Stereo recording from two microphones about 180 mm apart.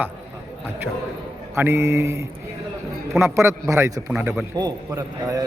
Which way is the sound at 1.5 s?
15° right (ahead or behind).